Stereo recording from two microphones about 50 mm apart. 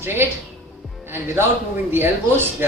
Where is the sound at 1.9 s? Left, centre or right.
Right.